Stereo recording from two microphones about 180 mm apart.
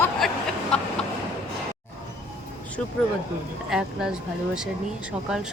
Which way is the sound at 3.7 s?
5° right (ahead or behind).